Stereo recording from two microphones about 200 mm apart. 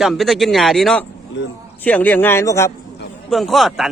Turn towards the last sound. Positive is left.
turn(degrees=0)  # may be behind; listen again after turning